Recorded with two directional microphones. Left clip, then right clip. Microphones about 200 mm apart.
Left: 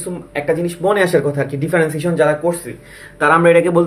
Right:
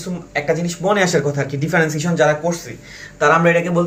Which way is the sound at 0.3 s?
35° left (ahead or behind).